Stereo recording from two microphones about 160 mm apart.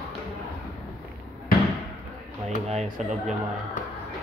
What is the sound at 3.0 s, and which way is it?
Speech, 50° right (ahead or behind).